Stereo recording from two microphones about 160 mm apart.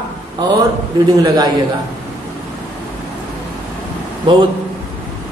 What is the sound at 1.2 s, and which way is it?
Mantra, 25° right (ahead or behind).